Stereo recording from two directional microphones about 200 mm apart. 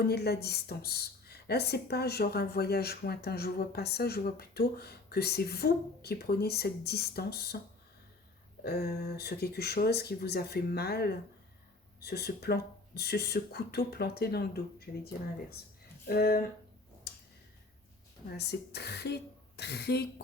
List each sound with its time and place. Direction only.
0.0 s speech: 55° left (ahead or behind)
8.6 s speech: 50° left (ahead or behind)
16.0 s speech: 50° left (ahead or behind)
18.3 s speech: 55° left (ahead or behind)